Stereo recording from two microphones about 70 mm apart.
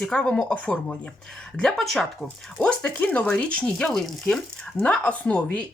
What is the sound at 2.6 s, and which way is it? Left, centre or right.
Speech, centre.